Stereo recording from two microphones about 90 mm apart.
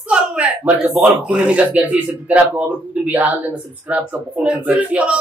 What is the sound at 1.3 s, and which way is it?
Speech, 10° right (ahead or behind).